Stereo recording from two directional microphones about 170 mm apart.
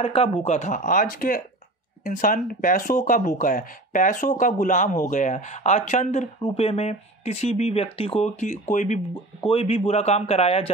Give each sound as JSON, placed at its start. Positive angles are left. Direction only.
{"t": 0.0, "sound": "speech", "side_deg": 35}
{"t": 9.5, "sound": "a man's voice", "side_deg": 35}